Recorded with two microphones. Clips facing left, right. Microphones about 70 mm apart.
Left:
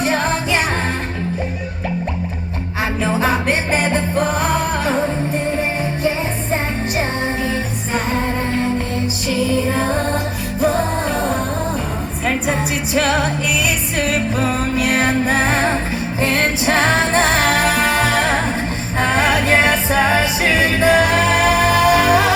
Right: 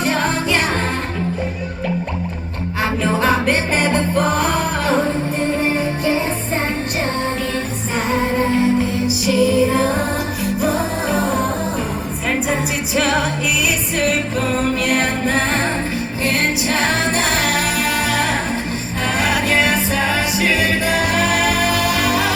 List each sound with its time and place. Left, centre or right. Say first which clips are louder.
0.0 s music: even; centre
3.2 s music: right 1 dB; centre
10.6 s music: left 4 dB; centre
12.5 s music: left 1 dB; centre
14.8 s music: left 2 dB; centre
16.2 s music: left 2 dB; left